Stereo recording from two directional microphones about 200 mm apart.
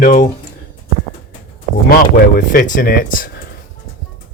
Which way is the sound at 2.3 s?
45° left (ahead or behind).